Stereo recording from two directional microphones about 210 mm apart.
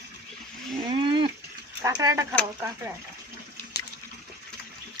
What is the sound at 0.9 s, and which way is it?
Livestock, 20° right (ahead or behind).